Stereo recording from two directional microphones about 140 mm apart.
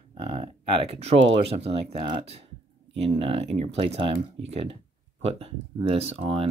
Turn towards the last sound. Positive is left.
turn(degrees=-45)  # may be behind; listen again after turning